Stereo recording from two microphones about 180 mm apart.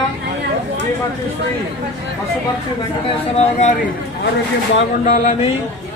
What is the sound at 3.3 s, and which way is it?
Speech, 40° left (ahead or behind).